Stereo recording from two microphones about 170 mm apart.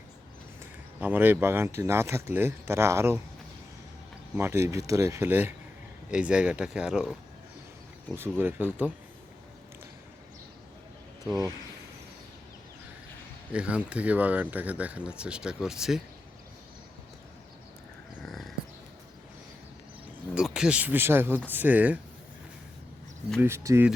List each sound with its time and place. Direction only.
0.9 s speech: 10° right (ahead or behind)
4.4 s speech: 15° right (ahead or behind)
13.5 s speech: 5° right (ahead or behind)
20.3 s speech: 5° right (ahead or behind)
23.4 s speech: 15° right (ahead or behind)